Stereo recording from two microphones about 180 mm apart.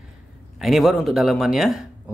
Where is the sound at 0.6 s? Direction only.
Centre (ahead or behind).